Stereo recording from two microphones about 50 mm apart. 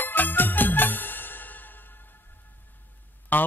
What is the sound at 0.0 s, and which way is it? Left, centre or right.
Music, left.